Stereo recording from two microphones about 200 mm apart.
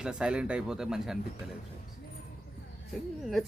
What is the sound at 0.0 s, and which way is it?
Speech, 5° right (ahead or behind).